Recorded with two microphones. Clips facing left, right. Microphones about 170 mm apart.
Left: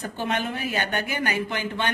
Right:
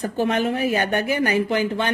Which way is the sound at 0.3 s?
35° right (ahead or behind).